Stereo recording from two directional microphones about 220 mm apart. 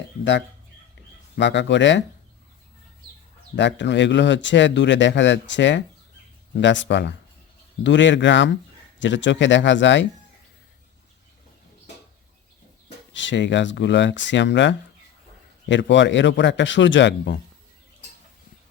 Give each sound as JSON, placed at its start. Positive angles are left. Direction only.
{"t": 1.4, "sound": "a man's voice", "side_deg": 55}
{"t": 3.5, "sound": "a man's voice", "side_deg": 55}
{"t": 13.1, "sound": "a man's voice", "side_deg": 55}